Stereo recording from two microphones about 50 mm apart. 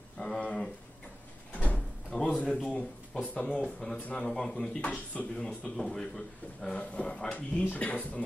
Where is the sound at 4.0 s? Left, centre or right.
Left.